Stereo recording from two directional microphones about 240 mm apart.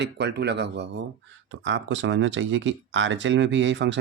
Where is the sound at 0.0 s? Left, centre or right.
Right.